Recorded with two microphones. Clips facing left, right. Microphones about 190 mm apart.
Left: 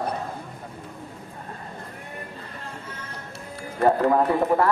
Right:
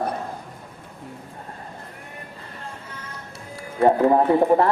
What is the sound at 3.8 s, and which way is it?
Speech, 25° right (ahead or behind).